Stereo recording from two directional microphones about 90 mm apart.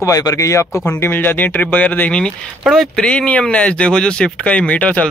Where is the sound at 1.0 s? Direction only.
25° left (ahead or behind).